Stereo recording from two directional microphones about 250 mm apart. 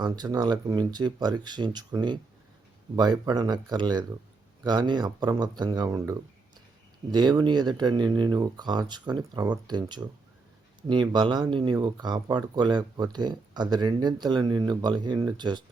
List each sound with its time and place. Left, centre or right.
0.0 s speech: centre